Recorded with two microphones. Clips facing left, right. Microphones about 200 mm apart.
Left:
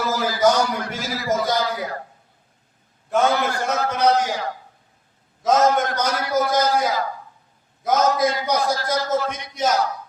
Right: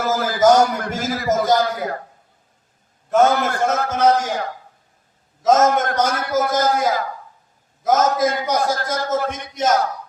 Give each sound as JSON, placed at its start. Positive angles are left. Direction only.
{"t": 0.0, "sound": "a sound", "side_deg": -50}
{"t": 3.2, "sound": "a man's voice", "side_deg": -50}
{"t": 5.5, "sound": "a man's voice", "side_deg": -45}